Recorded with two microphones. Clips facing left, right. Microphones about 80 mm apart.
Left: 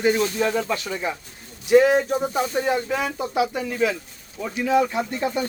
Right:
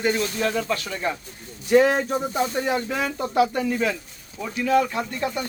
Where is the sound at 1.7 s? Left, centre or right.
Centre.